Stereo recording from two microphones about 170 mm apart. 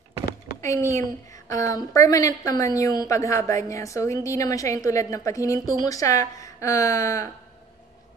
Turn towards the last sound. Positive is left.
turn(degrees=20)  # may be behind; listen again after turning